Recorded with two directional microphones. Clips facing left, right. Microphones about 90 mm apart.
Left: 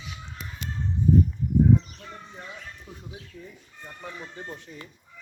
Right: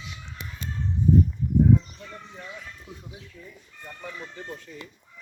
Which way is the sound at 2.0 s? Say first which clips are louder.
Even; 25° left (ahead or behind).